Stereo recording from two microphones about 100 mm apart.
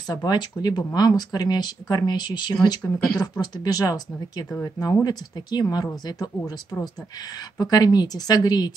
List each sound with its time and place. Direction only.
0.1 s speech: 45° left (ahead or behind)